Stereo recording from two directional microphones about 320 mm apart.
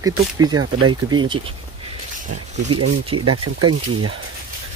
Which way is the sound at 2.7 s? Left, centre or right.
Right.